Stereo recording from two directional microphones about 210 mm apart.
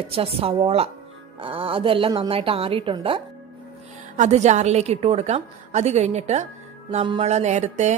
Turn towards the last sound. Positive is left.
turn(degrees=-35)  # may be behind; listen again after turning